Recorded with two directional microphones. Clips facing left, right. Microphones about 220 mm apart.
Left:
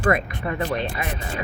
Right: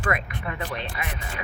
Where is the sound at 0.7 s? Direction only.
45° left (ahead or behind).